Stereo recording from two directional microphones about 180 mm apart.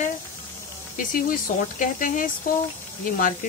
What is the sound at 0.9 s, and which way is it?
Speech, 50° left (ahead or behind).